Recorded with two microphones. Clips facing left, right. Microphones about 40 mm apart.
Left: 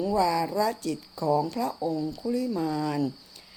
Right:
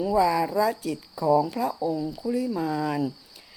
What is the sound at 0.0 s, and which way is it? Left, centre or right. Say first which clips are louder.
Speech: right 3 dB; centre.